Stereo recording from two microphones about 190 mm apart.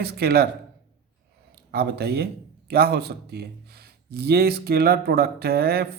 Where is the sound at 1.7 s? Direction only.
60° right (ahead or behind).